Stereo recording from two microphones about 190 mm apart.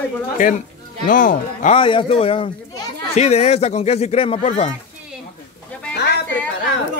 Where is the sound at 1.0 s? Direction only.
45° left (ahead or behind).